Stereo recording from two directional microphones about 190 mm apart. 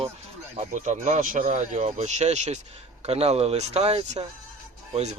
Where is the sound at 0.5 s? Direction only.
40° right (ahead or behind).